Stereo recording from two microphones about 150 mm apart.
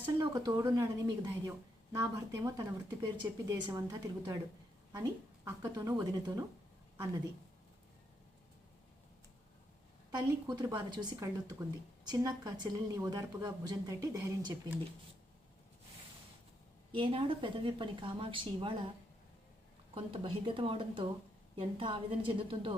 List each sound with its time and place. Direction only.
0.2 s a woman's voice: 25° right (ahead or behind)
5.5 s a woman's voice: 20° right (ahead or behind)
10.2 s a woman's voice: 25° right (ahead or behind)
16.9 s speech: 35° right (ahead or behind)
19.9 s speech: 35° right (ahead or behind)